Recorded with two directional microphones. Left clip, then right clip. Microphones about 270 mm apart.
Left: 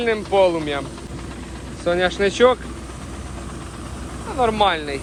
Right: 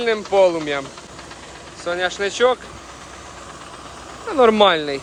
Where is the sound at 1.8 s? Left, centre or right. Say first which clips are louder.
Left 3 dB; centre.